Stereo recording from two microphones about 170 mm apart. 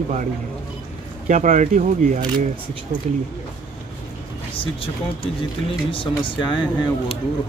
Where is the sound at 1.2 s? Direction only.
45° right (ahead or behind).